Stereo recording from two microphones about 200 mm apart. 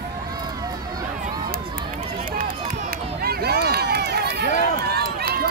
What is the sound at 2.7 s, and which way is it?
Run, 50° right (ahead or behind).